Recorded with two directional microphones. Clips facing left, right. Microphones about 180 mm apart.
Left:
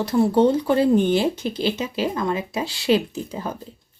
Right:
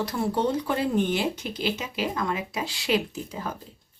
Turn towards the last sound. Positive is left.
turn(degrees=30)  # may be behind; listen again after turning